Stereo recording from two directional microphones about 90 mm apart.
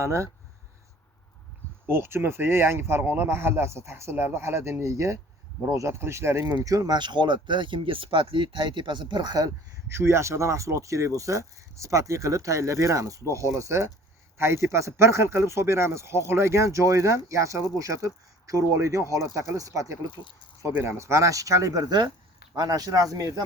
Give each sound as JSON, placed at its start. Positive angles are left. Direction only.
{"t": 0.0, "sound": "speech", "side_deg": -30}
{"t": 1.9, "sound": "speech", "side_deg": -25}
{"t": 6.7, "sound": "speech", "side_deg": -45}
{"t": 9.9, "sound": "speech", "side_deg": -30}
{"t": 21.0, "sound": "speech", "side_deg": -35}